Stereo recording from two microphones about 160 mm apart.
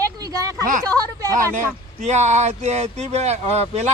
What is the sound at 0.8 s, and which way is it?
Speech, 20° right (ahead or behind).